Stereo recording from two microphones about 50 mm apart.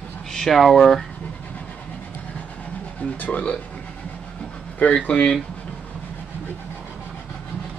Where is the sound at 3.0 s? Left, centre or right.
Left.